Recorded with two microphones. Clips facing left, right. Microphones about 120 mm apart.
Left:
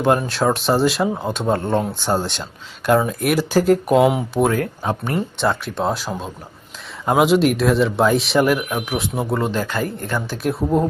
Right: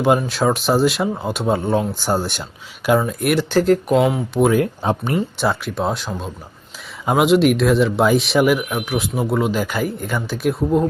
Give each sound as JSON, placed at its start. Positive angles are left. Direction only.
{"t": 0.0, "sound": "speech", "side_deg": 0}
{"t": 4.5, "sound": "speech", "side_deg": -25}
{"t": 5.4, "sound": "speech", "side_deg": -5}